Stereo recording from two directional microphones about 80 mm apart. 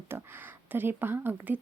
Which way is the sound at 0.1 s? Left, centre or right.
Right.